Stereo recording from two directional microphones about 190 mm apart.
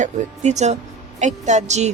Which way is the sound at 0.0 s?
35° right (ahead or behind).